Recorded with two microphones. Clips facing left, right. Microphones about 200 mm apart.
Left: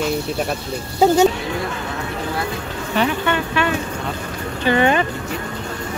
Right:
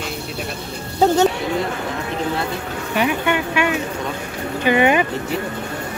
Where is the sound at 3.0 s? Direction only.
15° right (ahead or behind).